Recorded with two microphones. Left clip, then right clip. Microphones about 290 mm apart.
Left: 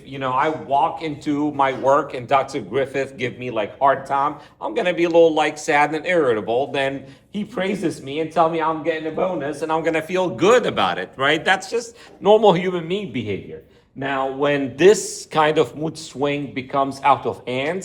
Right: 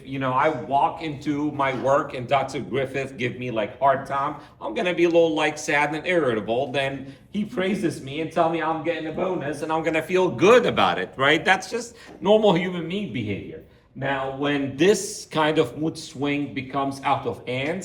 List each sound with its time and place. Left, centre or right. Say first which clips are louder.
0.1 s a man's voice: left 1 dB; centre; by 13.2 s left
14.4 s speech: left 6 dB; left